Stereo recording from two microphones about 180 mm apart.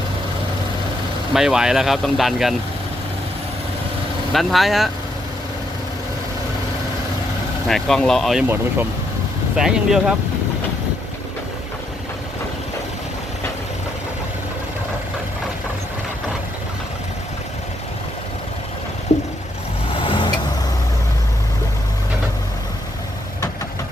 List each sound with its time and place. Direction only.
1.3 s speech: centre (ahead or behind)
4.3 s speech: centre (ahead or behind)
7.7 s speech: centre (ahead or behind)
9.6 s speech: centre (ahead or behind)
20.0 s vehicle: 25° left (ahead or behind)